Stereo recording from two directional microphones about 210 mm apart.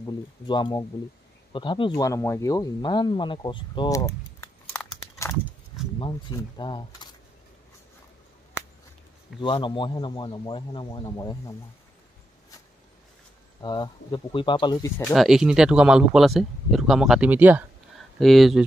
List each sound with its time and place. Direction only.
0.0 s speech: 20° left (ahead or behind)
9.4 s speech: 20° left (ahead or behind)
13.6 s speech: 20° left (ahead or behind)
15.0 s speech: centre (ahead or behind)